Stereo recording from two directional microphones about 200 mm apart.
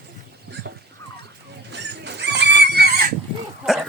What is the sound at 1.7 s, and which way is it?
Neigh, 60° right (ahead or behind).